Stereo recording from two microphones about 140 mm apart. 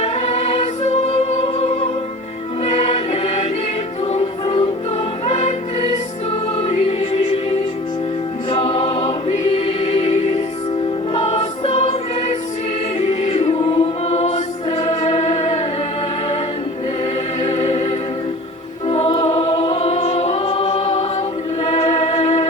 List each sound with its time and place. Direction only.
0.0 s music: 50° left (ahead or behind)
8.4 s music: 45° left (ahead or behind)
11.1 s choir: 45° left (ahead or behind)
13.0 s choir: 50° left (ahead or behind)
17.4 s music: 50° left (ahead or behind)
18.9 s choir: 45° left (ahead or behind)
21.7 s music: 50° left (ahead or behind)